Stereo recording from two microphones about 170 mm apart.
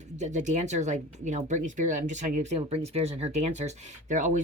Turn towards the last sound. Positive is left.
turn(degrees=-50)  # may be behind; listen again after turning